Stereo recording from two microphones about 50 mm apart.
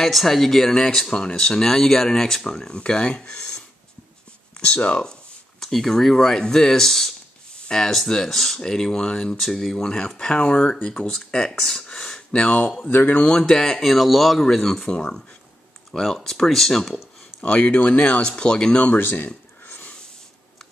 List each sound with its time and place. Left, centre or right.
0.0 s speech: centre
2.7 s speech: left
9.4 s speech: centre
12.3 s speech: left
12.9 s speech: left
13.2 s speech: centre
15.9 s speech: centre
17.4 s speech: left
18.1 s speech: centre
18.9 s a sound: left